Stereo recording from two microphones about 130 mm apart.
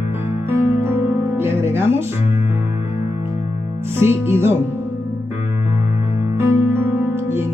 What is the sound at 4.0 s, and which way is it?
Music, 20° right (ahead or behind).